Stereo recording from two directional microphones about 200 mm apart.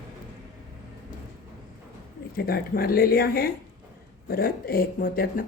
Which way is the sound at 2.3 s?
50° left (ahead or behind).